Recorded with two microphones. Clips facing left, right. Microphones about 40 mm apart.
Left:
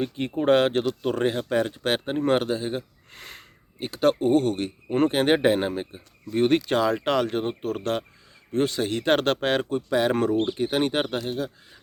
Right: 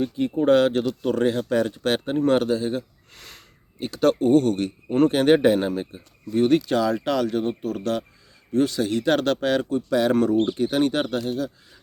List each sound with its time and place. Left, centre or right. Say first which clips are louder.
0.0 s speech: right 3 dB; left; by 6.0 s centre
6.3 s speech: right 2 dB; left
9.9 s speech: right 2 dB; centre
10.3 s speech: right 3 dB; centre
10.6 s speech: right 2 dB; left